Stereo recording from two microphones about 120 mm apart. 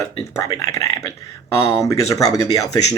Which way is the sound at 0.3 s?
30° left (ahead or behind).